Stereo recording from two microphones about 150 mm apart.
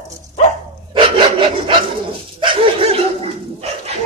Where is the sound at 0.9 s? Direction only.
35° right (ahead or behind).